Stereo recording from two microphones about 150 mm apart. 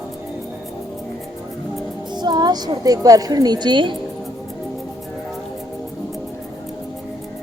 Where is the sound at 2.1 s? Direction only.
30° right (ahead or behind).